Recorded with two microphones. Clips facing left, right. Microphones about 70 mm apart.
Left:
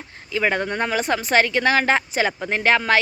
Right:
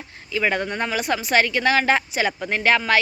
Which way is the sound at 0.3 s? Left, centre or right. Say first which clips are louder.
Left 1 dB; left.